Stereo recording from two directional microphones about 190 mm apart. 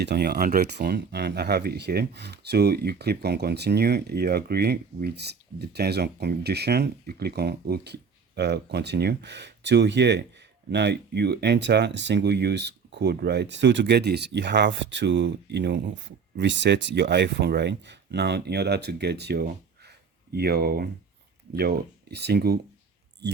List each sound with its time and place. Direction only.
0.0 s speech: 60° right (ahead or behind)